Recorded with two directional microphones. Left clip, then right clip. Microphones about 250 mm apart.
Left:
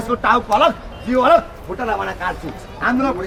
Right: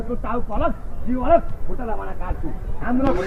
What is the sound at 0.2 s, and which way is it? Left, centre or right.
Speech, centre.